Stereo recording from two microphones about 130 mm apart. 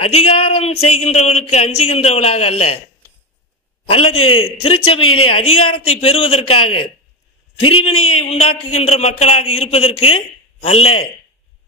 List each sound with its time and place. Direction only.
0.0 s speech: 50° left (ahead or behind)
3.9 s speech: 45° left (ahead or behind)